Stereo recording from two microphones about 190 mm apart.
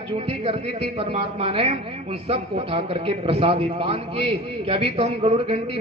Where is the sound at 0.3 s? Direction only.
30° right (ahead or behind).